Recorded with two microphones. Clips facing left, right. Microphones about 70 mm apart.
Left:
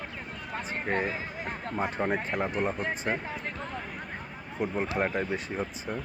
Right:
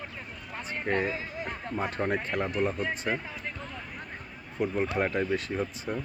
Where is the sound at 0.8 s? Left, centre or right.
Centre.